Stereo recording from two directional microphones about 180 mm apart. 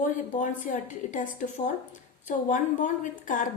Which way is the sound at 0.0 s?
45° left (ahead or behind).